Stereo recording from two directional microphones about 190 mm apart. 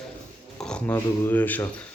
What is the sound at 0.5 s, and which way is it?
Speech, 5° left (ahead or behind).